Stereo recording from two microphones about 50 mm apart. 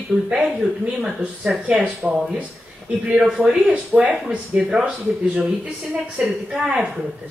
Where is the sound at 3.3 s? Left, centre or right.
Centre.